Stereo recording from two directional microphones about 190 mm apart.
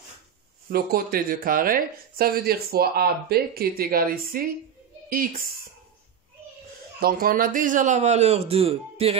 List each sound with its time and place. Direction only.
0.7 s speech: 50° right (ahead or behind)
7.0 s speech: 50° right (ahead or behind); by 9.1 s 30° right (ahead or behind)